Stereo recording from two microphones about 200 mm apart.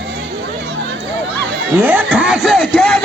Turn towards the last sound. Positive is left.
turn(degrees=5)  # may be behind; listen again after turning